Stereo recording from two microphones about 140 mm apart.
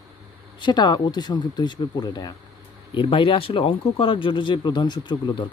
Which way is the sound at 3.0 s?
40° left (ahead or behind).